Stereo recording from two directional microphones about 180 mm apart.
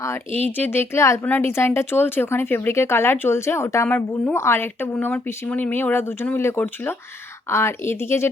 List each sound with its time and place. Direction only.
0.4 s speech: 10° left (ahead or behind)